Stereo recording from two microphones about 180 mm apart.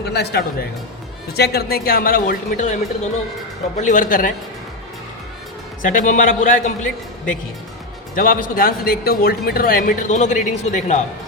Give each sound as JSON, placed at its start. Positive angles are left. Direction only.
{"t": 0.0, "sound": "a man's voice", "side_deg": 65}
{"t": 3.8, "sound": "speech", "side_deg": 45}
{"t": 5.8, "sound": "speech", "side_deg": 45}